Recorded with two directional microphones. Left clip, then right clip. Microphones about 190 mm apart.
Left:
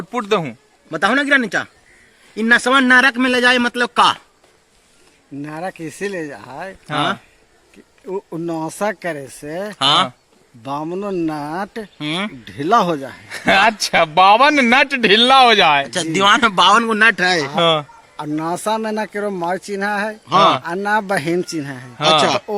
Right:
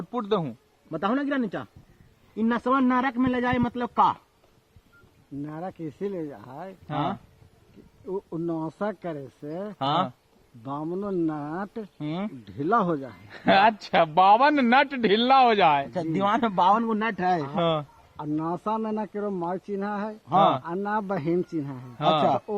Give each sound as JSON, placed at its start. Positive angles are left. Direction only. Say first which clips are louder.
{"t": 0.1, "sound": "speech", "louder": "left 8 dB", "side_deg": 15}
{"t": 0.9, "sound": "a man's voice", "louder": "left 12 dB", "side_deg": 0}
{"t": 3.7, "sound": "a man's voice", "louder": "left 8 dB", "side_deg": 20}
{"t": 5.5, "sound": "a man's voice", "louder": "left 10 dB", "side_deg": 15}
{"t": 11.9, "sound": "speech", "louder": "left 11 dB", "side_deg": -5}
{"t": 12.5, "sound": "speech", "louder": "left 9 dB", "side_deg": 10}
{"t": 13.0, "sound": "a man's voice", "louder": "left 10 dB", "side_deg": 25}
{"t": 15.9, "sound": "a man's voice", "louder": "left 11 dB", "side_deg": -15}
{"t": 17.5, "sound": "a man's voice", "louder": "left 10 dB", "side_deg": 25}
{"t": 20.3, "sound": "a man's voice", "louder": "left 8 dB", "side_deg": 20}
{"t": 20.7, "sound": "speech", "louder": "left 10 dB", "side_deg": 10}
{"t": 21.9, "sound": "a man's voice", "louder": "left 9 dB", "side_deg": 25}